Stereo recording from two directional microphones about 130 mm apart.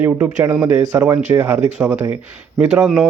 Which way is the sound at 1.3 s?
15° right (ahead or behind).